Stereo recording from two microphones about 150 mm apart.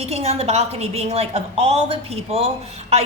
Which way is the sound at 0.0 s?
45° right (ahead or behind).